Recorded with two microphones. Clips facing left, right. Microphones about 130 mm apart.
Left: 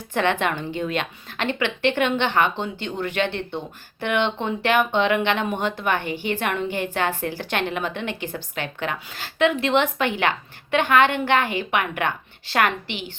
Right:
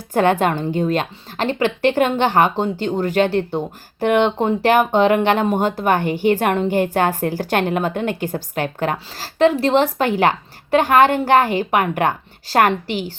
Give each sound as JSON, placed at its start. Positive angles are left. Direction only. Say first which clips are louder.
{"t": 0.1, "sound": "speech", "louder": "right 6 dB", "side_deg": -45}